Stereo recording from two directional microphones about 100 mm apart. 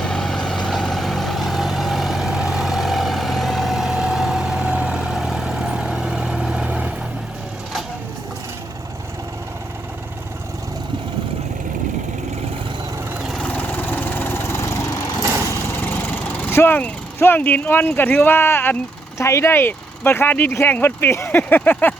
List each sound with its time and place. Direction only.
0.0 s vehicle: 5° left (ahead or behind); by 6.9 s 10° right (ahead or behind)
13.2 s vehicle: 5° left (ahead or behind); by 15.0 s 30° left (ahead or behind)
15.8 s vehicle: 20° left (ahead or behind)
19.2 s speech: 30° left (ahead or behind)